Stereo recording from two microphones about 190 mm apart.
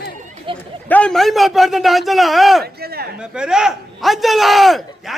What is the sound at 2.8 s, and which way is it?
Speech, 55° right (ahead or behind).